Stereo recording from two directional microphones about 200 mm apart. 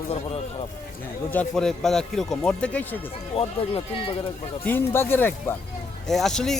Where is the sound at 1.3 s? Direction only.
5° left (ahead or behind).